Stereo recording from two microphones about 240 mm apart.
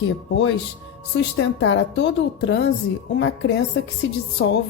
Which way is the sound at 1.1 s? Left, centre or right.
Left.